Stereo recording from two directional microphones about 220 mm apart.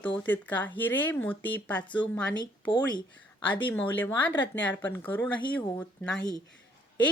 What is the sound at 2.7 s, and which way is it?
Speech, 20° left (ahead or behind).